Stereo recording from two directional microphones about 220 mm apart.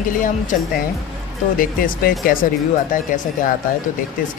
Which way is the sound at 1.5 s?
40° left (ahead or behind).